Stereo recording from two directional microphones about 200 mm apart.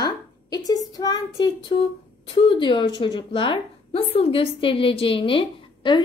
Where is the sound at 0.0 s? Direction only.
20° left (ahead or behind).